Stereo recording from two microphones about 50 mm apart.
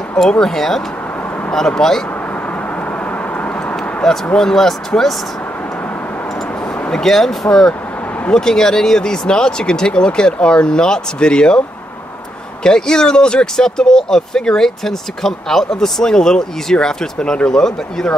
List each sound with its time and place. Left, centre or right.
0.3 s speech: centre
3.1 s vehicle: left
3.7 s a sound: centre
4.4 s speech: centre
6.9 s speech: centre
12.6 s speech: centre